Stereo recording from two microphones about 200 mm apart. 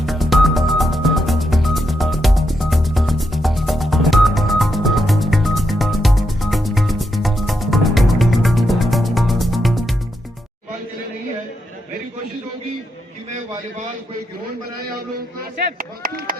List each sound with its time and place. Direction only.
0.0 s music: centre (ahead or behind)
15.8 s chop: 45° right (ahead or behind)